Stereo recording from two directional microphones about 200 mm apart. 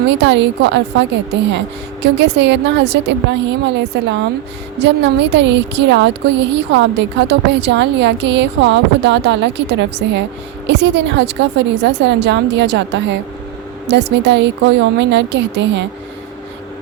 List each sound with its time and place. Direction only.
0.1 s speech: 60° right (ahead or behind)